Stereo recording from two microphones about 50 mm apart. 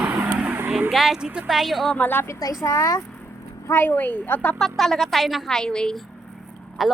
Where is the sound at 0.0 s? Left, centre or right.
Right.